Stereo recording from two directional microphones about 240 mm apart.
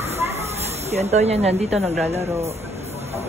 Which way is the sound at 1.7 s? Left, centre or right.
Centre.